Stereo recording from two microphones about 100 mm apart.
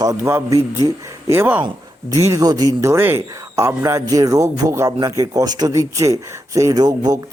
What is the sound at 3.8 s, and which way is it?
Speech, 35° right (ahead or behind).